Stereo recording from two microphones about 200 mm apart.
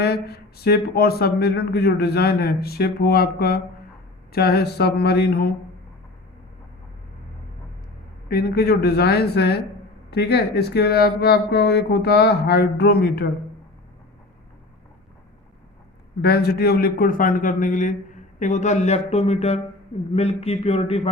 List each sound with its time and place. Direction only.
0.0 s speech: 55° left (ahead or behind)
8.3 s speech: 50° left (ahead or behind)
16.2 s a man's voice: 50° left (ahead or behind); by 21.1 s 30° left (ahead or behind)